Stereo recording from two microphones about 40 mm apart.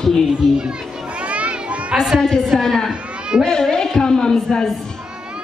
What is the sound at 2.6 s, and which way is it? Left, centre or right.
Speech, centre.